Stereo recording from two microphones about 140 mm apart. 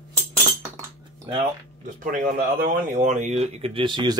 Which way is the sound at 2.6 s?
75° right (ahead or behind).